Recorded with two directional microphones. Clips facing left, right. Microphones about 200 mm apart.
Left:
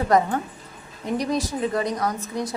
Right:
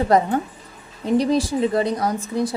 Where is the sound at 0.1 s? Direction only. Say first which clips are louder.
Right 1 dB; 30° right (ahead or behind).